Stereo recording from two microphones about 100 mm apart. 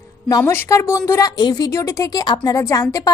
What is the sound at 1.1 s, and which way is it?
A woman's voice, 35° left (ahead or behind).